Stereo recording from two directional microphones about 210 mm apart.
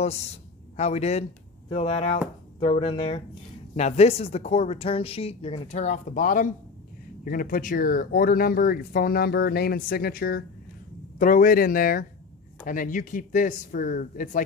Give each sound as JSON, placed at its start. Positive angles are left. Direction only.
{"t": 0.0, "sound": "a man's voice", "side_deg": 30}